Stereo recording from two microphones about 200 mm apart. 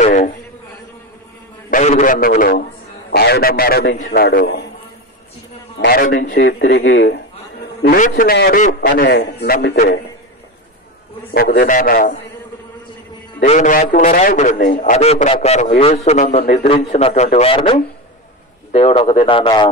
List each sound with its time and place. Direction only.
0.0 s a sound: 40° left (ahead or behind)
1.7 s a man's voice: 40° left (ahead or behind)
5.8 s a man's voice: 55° left (ahead or behind)
7.8 s a man's voice: 45° left (ahead or behind)
8.8 s a man's voice: 55° left (ahead or behind)
11.3 s a man's voice: 50° left (ahead or behind)
13.4 s a man's voice: 40° left (ahead or behind); by 19.7 s 25° left (ahead or behind)